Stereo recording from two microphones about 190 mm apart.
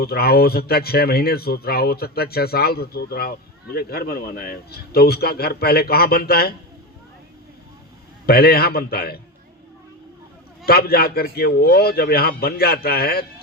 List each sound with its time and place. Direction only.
0.0 s speech: 55° left (ahead or behind)
8.3 s speech: 55° left (ahead or behind)
10.7 s speech: 55° left (ahead or behind)